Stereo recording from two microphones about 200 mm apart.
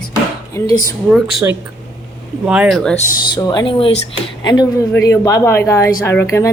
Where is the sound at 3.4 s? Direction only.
20° left (ahead or behind).